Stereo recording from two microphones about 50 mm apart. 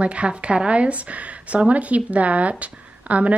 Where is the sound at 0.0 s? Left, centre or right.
Right.